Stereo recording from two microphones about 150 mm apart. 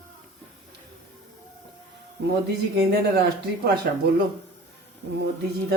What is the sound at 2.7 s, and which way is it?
Speech, 90° right.